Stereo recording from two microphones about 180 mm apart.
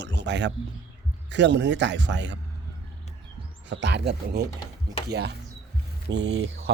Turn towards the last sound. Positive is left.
turn(degrees=-65)  # may be behind; listen again after turning